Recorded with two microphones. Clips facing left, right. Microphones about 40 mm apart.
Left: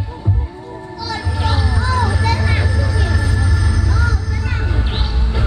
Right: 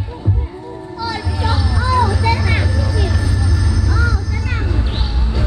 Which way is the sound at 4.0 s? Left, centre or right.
Centre.